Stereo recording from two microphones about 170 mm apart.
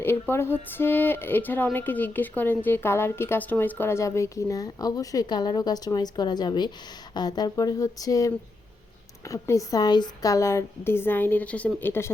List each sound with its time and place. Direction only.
0.0 s speech: 15° left (ahead or behind)